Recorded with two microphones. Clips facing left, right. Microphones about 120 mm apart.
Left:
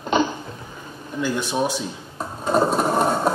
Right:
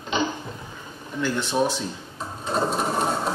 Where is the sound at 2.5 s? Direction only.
50° left (ahead or behind).